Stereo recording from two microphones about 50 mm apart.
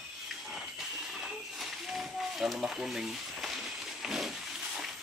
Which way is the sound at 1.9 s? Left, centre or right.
Centre.